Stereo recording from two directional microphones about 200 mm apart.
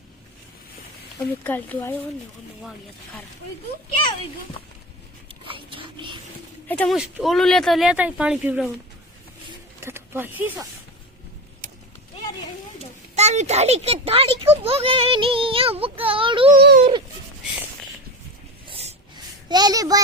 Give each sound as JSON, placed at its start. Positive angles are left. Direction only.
{"t": 1.5, "sound": "speech", "side_deg": 10}
{"t": 5.5, "sound": "a sound", "side_deg": -25}
{"t": 6.7, "sound": "speech", "side_deg": 10}
{"t": 9.8, "sound": "speech", "side_deg": -10}
{"t": 13.1, "sound": "a child's voice", "side_deg": -35}
{"t": 16.5, "sound": "speech", "side_deg": -50}
{"t": 18.7, "sound": "a sound", "side_deg": -30}
{"t": 19.5, "sound": "a child's voice", "side_deg": -20}